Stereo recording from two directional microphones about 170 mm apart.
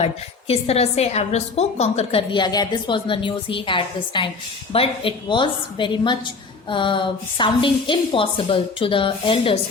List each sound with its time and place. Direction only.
0.0 s a woman's voice: 35° left (ahead or behind)